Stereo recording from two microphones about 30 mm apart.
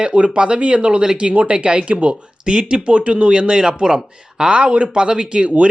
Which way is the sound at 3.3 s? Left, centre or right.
Right.